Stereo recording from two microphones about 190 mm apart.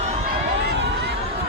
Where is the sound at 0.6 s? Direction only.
65° right (ahead or behind).